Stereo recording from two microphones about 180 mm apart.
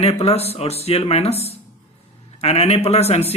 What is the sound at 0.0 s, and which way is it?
A man's voice, 35° left (ahead or behind).